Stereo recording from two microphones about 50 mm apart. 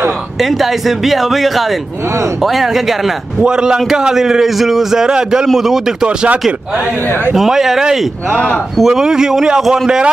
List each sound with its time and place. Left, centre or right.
0.4 s speech: centre
3.3 s a man's voice: centre
6.0 s speech: right
7.3 s a man's voice: centre